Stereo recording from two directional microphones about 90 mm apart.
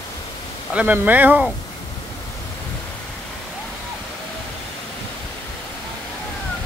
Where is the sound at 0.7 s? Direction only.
20° right (ahead or behind).